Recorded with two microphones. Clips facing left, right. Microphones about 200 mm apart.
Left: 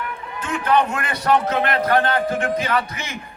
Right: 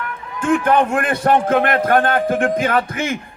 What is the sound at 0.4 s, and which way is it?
A man's voice, 50° right (ahead or behind).